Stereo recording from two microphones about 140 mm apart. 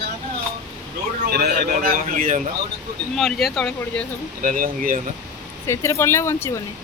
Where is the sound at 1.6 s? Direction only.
85° right.